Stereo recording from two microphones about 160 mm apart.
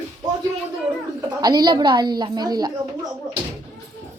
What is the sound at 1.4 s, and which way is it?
A woman's voice, 25° right (ahead or behind).